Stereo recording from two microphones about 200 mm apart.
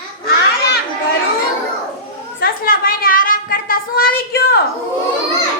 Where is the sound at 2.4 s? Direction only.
45° left (ahead or behind).